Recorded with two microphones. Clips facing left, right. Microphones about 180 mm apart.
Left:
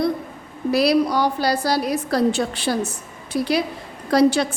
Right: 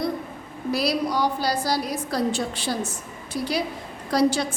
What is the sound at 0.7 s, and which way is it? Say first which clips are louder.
A woman's voice: left 6 dB; 65° left (ahead or behind).